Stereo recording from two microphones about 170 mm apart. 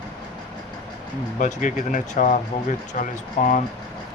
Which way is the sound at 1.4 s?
45° left (ahead or behind).